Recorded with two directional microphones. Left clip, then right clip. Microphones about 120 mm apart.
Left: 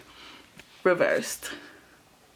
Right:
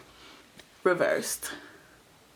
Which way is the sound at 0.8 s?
45° left (ahead or behind).